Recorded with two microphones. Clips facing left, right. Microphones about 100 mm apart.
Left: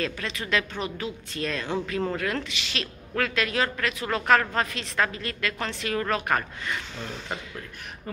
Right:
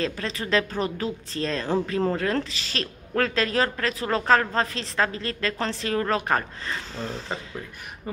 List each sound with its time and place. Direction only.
0.0 s speech: 35° right (ahead or behind)